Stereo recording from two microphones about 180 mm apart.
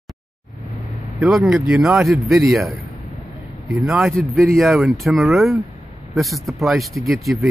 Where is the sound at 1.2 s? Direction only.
Centre (ahead or behind).